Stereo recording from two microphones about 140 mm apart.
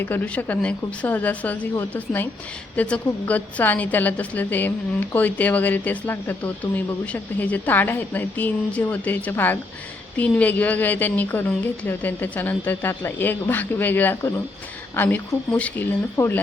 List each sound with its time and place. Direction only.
0.0 s a woman's voice: 15° left (ahead or behind)